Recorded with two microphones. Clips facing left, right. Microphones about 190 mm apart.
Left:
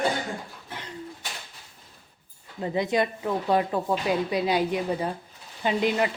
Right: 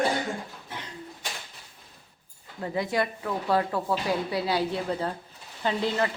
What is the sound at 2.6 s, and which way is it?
Speech, 20° left (ahead or behind).